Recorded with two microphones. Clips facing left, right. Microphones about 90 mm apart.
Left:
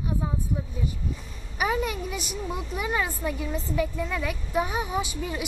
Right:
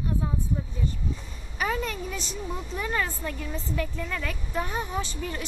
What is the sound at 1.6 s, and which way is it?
A woman's voice, 10° left (ahead or behind).